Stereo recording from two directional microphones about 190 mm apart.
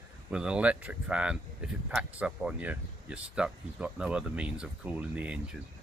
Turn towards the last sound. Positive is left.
turn(degrees=-5)  # may be behind; listen again after turning